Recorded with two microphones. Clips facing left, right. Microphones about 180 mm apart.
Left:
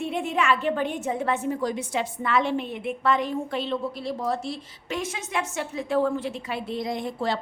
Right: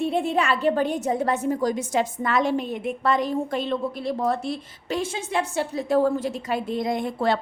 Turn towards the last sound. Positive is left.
turn(degrees=-60)  # may be behind; listen again after turning